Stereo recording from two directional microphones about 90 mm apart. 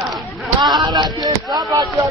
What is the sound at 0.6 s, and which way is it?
Speech, 50° right (ahead or behind).